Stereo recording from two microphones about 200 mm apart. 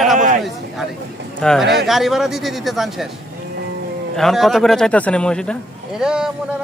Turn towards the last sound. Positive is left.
turn(degrees=-5)  # may be behind; listen again after turning